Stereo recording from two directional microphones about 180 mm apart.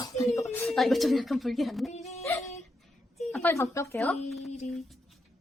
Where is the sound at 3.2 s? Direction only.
5° left (ahead or behind).